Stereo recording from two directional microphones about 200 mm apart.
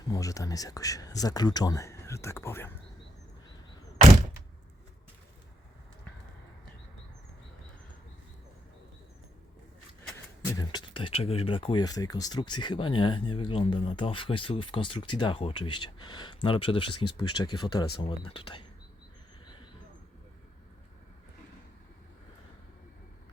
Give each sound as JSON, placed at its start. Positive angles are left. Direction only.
{"t": 0.1, "sound": "speech", "side_deg": 15}
{"t": 10.4, "sound": "speech", "side_deg": 15}